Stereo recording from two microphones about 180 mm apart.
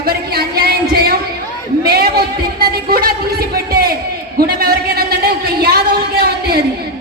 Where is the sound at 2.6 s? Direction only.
55° right (ahead or behind).